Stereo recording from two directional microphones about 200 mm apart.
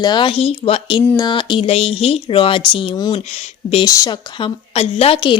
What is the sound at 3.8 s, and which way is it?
A woman's voice, 15° left (ahead or behind).